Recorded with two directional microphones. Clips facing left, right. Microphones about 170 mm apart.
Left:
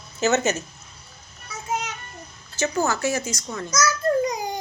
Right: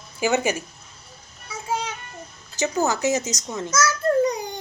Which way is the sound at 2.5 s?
15° right (ahead or behind).